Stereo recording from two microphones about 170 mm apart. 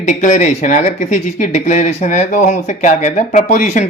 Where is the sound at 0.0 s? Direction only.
45° left (ahead or behind).